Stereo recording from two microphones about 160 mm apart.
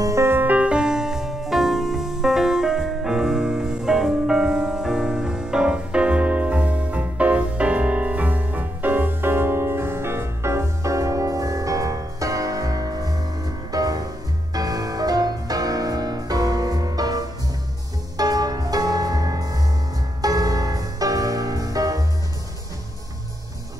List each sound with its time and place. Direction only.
0.0 s music: 20° right (ahead or behind)